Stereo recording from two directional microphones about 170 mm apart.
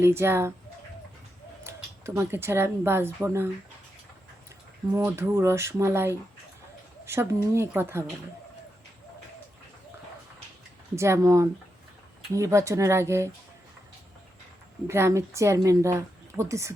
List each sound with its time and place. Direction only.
0.0 s speech: 15° right (ahead or behind)
1.6 s speech: 15° right (ahead or behind)
4.9 s speech: 15° right (ahead or behind)
7.0 s a sound: 15° right (ahead or behind)
7.4 s speech: 15° right (ahead or behind)
10.9 s speech: 15° right (ahead or behind)
14.8 s speech: 15° right (ahead or behind)